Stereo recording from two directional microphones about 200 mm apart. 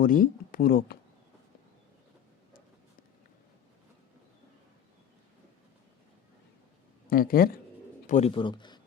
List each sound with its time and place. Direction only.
0.0 s speech: 45° left (ahead or behind)
7.1 s speech: 45° left (ahead or behind)
8.0 s speech: 35° left (ahead or behind)